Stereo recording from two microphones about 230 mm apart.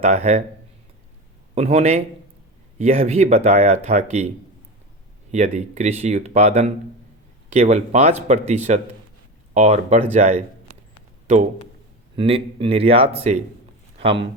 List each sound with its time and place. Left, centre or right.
0.0 s speech: right
1.5 s speech: right
5.3 s speech: right
12.1 s speech: right